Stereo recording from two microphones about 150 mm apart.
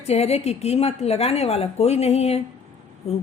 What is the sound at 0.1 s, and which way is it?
A woman's voice, 45° left (ahead or behind).